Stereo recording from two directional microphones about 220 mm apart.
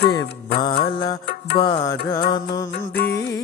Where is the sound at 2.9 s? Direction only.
50° left (ahead or behind).